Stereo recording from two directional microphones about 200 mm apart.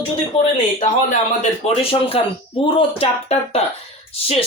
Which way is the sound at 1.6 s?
30° left (ahead or behind).